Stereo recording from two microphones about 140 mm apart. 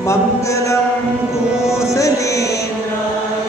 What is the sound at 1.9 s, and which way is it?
Music, 20° left (ahead or behind).